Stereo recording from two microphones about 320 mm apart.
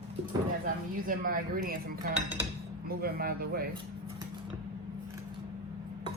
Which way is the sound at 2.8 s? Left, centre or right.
Right.